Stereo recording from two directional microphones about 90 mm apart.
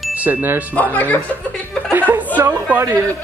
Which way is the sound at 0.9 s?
15° left (ahead or behind).